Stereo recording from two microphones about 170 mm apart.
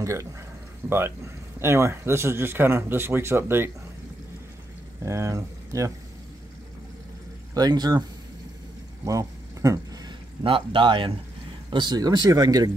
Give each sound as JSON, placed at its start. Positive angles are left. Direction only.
{"t": 0.0, "sound": "speech", "side_deg": -20}
{"t": 5.0, "sound": "speech", "side_deg": -15}
{"t": 7.5, "sound": "speech", "side_deg": -25}
{"t": 9.0, "sound": "a sound", "side_deg": -20}
{"t": 10.4, "sound": "speech", "side_deg": -30}